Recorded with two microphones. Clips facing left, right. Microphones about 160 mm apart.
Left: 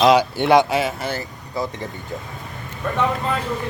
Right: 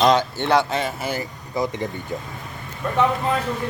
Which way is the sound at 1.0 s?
15° right (ahead or behind).